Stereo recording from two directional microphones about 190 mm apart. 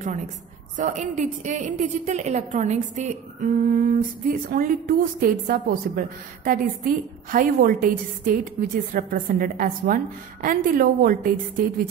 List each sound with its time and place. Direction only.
0.7 s a woman's voice: 40° right (ahead or behind)